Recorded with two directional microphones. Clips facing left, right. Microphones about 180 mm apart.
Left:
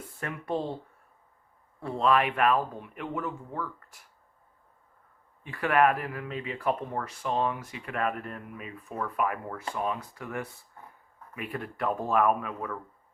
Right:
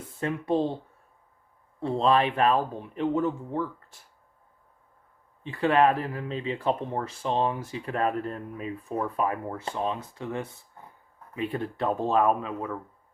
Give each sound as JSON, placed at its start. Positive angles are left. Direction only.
{"t": 0.2, "sound": "speech", "side_deg": -20}
{"t": 1.8, "sound": "speech", "side_deg": -30}
{"t": 5.4, "sound": "speech", "side_deg": -25}